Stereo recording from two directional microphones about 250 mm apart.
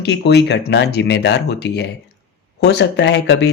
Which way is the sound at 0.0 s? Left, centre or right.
Left.